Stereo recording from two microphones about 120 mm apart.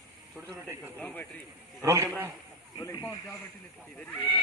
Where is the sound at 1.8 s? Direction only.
25° right (ahead or behind).